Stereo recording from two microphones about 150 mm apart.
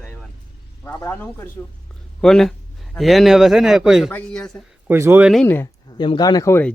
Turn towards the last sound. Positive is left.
turn(degrees=15)  # may be behind; listen again after turning